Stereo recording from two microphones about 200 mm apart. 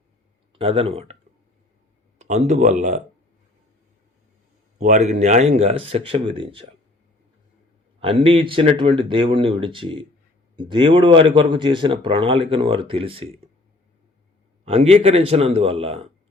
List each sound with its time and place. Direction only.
0.6 s speech: 30° right (ahead or behind)
2.1 s speech: 35° right (ahead or behind)
4.8 s speech: 35° right (ahead or behind)
8.0 s speech: 25° right (ahead or behind)
14.6 s speech: 30° right (ahead or behind)